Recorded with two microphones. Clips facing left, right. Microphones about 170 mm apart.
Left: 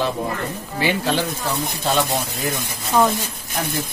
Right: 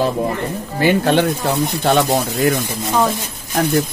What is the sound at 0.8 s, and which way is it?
Speech, 55° right (ahead or behind).